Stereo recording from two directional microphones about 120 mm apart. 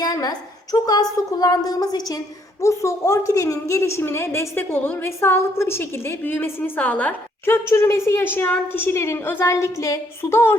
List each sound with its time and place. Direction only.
0.0 s a woman's voice: 35° left (ahead or behind)